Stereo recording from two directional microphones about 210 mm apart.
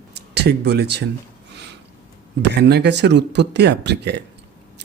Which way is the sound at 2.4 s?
55° right (ahead or behind).